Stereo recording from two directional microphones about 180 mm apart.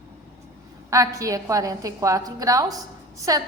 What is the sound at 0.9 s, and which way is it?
A woman's voice, 20° right (ahead or behind).